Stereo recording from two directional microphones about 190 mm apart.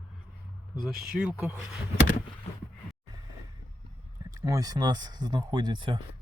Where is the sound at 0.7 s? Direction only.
Centre (ahead or behind).